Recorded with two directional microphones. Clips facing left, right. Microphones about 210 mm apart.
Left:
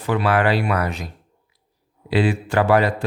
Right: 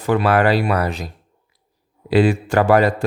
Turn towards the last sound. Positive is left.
turn(degrees=-45)  # may be behind; listen again after turning